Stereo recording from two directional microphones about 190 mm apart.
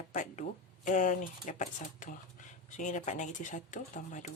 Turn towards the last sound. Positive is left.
turn(degrees=40)  # may be behind; listen again after turning